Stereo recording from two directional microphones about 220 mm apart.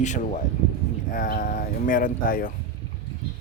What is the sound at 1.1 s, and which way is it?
Speech, 40° left (ahead or behind).